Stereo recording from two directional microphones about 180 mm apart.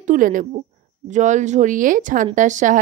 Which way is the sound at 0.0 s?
45° right (ahead or behind).